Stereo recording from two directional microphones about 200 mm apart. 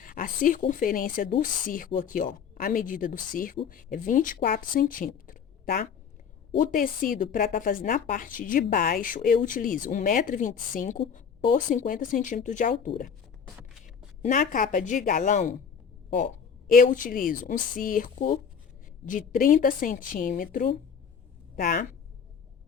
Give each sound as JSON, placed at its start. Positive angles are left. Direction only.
{"t": 0.0, "sound": "a sound", "side_deg": 45}
{"t": 0.7, "sound": "speech", "side_deg": 45}
{"t": 14.2, "sound": "speech", "side_deg": 40}
{"t": 16.7, "sound": "a woman's voice", "side_deg": 40}